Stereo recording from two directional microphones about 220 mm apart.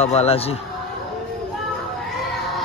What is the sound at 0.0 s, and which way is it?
Speech, 30° left (ahead or behind).